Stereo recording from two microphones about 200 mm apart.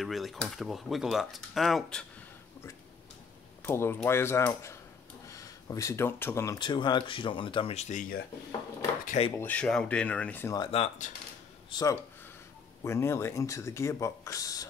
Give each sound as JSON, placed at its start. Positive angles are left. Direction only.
{"t": 0.0, "sound": "speech", "side_deg": 0}
{"t": 3.6, "sound": "speech", "side_deg": 10}
{"t": 9.0, "sound": "speech", "side_deg": 35}
{"t": 9.4, "sound": "speech", "side_deg": 5}
{"t": 10.7, "sound": "speech", "side_deg": 30}
{"t": 11.7, "sound": "speech", "side_deg": 15}